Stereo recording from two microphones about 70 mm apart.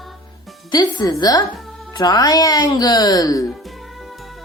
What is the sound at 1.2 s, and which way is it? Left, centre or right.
Speech, left.